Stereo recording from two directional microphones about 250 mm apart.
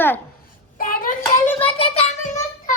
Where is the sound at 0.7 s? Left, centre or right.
Left.